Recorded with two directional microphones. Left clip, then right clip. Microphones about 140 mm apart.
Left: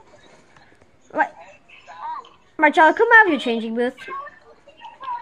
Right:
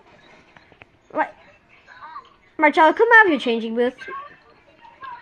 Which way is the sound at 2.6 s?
25° left (ahead or behind).